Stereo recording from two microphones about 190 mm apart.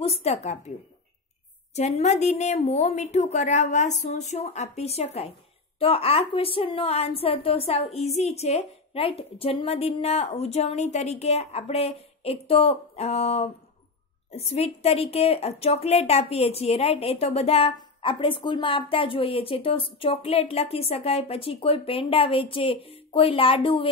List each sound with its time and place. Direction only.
0.0 s a woman's voice: 35° left (ahead or behind)